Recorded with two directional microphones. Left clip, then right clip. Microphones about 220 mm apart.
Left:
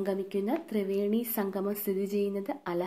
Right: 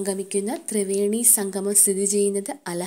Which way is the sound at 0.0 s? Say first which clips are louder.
Right 5 dB; 35° right (ahead or behind).